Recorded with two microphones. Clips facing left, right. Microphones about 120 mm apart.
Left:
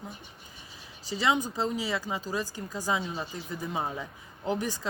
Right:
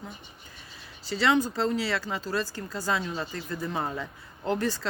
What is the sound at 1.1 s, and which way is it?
Speech, 15° left (ahead or behind).